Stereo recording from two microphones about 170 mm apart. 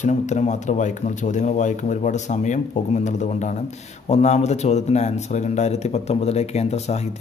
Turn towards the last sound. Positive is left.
turn(degrees=40)  # may be behind; listen again after turning